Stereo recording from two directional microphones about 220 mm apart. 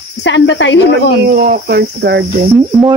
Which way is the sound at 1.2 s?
40° right (ahead or behind).